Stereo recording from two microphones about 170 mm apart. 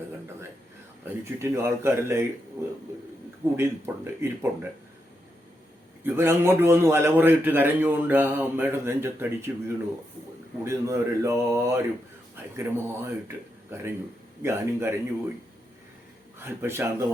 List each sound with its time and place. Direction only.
1.0 s a man's voice: 15° right (ahead or behind)
6.0 s a man's voice: 15° right (ahead or behind)
16.4 s a man's voice: 15° right (ahead or behind)